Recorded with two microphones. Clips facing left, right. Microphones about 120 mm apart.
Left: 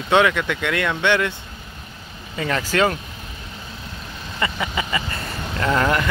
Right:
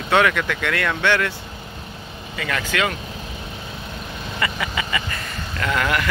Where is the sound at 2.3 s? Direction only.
30° left (ahead or behind).